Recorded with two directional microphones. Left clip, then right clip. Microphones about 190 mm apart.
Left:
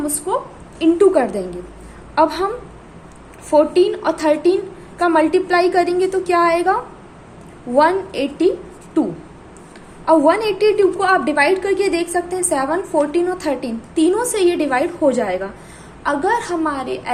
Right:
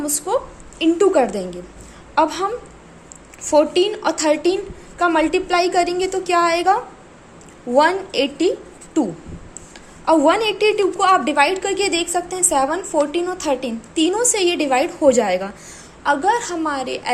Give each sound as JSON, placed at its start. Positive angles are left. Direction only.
{"t": 0.3, "sound": "a woman's voice", "side_deg": -25}
{"t": 3.5, "sound": "a woman's voice", "side_deg": -20}
{"t": 10.1, "sound": "a woman's voice", "side_deg": -15}
{"t": 16.0, "sound": "a woman's voice", "side_deg": -10}